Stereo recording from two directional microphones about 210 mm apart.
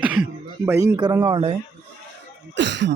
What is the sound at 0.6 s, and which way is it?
Speech, 15° right (ahead or behind).